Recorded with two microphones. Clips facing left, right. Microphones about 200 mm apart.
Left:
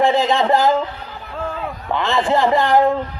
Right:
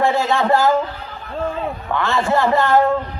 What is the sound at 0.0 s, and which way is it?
Speech, 15° left (ahead or behind).